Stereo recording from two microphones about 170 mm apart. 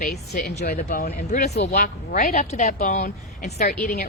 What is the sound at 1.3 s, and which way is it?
Speech, 40° left (ahead or behind).